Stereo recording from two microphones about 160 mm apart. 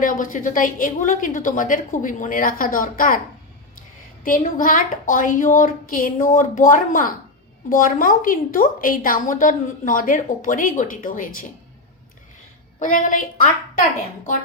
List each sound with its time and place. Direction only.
0.0 s a woman's voice: 60° left (ahead or behind)
4.2 s a woman's voice: 60° left (ahead or behind)
12.8 s a woman's voice: 55° left (ahead or behind)